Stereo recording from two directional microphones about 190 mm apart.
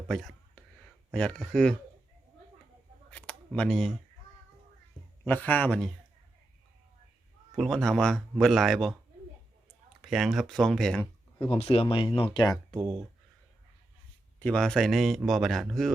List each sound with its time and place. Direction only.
0.1 s whispering: centre (ahead or behind)
1.1 s speech: 5° left (ahead or behind)
3.1 s a sound: 5° left (ahead or behind)
5.2 s a man's voice: 10° left (ahead or behind)
7.5 s speech: centre (ahead or behind)
10.0 s speech: centre (ahead or behind)
11.5 s speech: 30° left (ahead or behind)
14.3 s speech: 5° left (ahead or behind)